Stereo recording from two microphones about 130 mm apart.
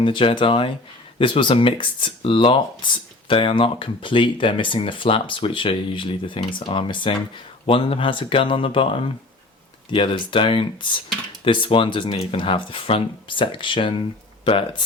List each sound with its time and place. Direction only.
0.0 s speech: 40° left (ahead or behind)